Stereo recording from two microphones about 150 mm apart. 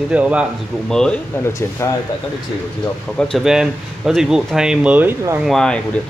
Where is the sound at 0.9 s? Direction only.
5° left (ahead or behind).